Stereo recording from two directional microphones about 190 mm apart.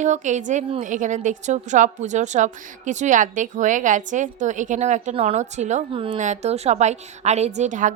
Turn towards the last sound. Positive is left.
turn(degrees=-40)  # may be behind; listen again after turning